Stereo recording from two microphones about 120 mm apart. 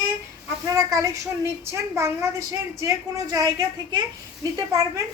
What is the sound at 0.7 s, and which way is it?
A woman's voice, 25° right (ahead or behind).